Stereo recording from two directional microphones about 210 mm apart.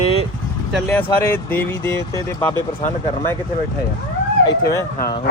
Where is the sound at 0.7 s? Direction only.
5° left (ahead or behind).